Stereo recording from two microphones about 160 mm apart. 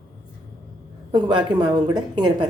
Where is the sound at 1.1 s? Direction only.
30° right (ahead or behind).